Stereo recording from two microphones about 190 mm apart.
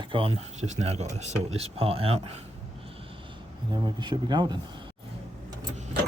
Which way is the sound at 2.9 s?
30° right (ahead or behind).